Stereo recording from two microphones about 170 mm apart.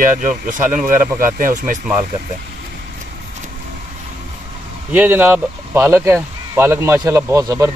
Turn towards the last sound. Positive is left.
turn(degrees=-20)  # may be behind; listen again after turning